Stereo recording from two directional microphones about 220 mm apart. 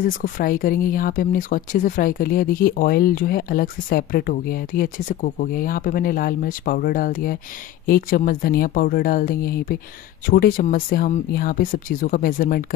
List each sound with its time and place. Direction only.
0.0 s speech: 40° left (ahead or behind)